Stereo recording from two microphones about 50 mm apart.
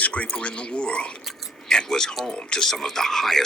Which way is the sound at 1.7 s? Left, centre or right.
Centre.